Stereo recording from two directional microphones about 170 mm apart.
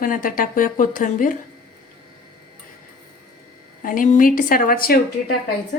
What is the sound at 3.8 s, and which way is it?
Speech, 50° left (ahead or behind).